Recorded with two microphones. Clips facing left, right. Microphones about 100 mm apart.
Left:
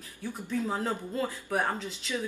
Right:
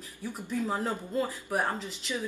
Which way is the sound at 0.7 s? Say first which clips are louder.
Even; centre (ahead or behind).